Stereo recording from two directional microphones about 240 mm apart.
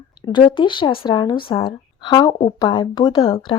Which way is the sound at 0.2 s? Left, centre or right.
Centre.